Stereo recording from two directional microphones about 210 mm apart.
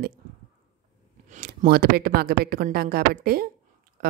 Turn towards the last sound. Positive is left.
turn(degrees=-45)  # may be behind; listen again after turning